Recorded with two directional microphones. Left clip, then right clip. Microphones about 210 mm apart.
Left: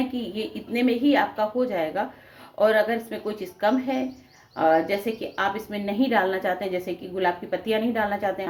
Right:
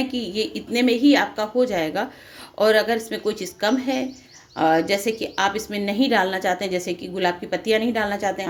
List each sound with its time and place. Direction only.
0.3 s a woman's voice: 40° right (ahead or behind)